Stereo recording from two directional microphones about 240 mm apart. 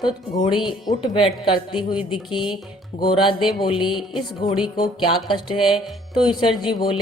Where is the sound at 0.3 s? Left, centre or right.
Left.